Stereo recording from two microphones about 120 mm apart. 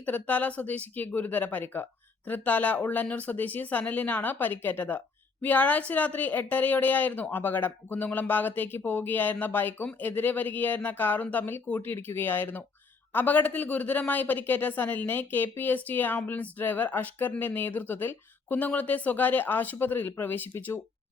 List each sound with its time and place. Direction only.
0.0 s speech: 15° left (ahead or behind)